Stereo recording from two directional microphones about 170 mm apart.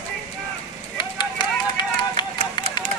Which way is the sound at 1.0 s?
25° left (ahead or behind).